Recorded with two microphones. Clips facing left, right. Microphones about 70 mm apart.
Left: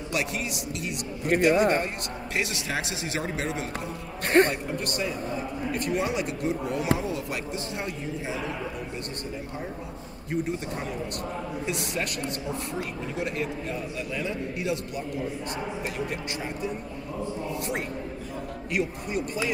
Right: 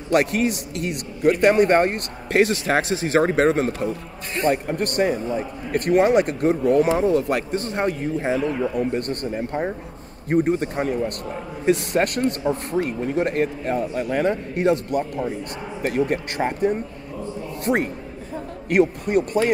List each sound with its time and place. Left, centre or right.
0.1 s a man's voice: right
18.7 s a man's voice: right